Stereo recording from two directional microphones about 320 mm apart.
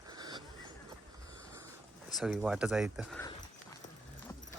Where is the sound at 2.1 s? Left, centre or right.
Centre.